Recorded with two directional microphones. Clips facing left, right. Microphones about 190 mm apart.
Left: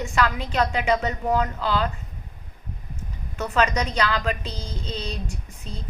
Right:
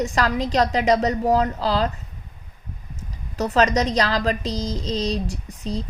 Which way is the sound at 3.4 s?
35° right (ahead or behind).